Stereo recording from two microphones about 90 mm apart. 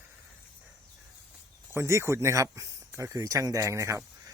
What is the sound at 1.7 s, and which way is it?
Speech, 30° right (ahead or behind).